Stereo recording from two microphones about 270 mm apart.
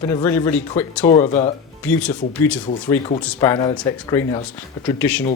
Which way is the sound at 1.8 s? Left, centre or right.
Centre.